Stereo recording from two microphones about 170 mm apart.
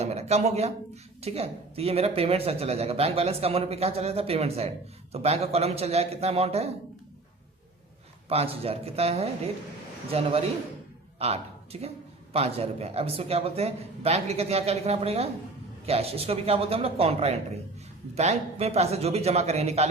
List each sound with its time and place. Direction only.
0.0 s speech: 40° right (ahead or behind)
8.3 s speech: 35° right (ahead or behind)